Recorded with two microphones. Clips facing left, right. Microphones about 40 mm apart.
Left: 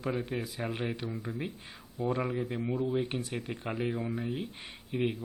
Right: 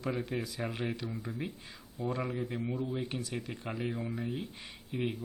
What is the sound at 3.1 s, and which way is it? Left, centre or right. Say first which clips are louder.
Speech: left 2 dB; left.